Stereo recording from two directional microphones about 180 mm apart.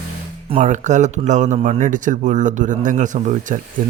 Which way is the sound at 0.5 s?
40° right (ahead or behind).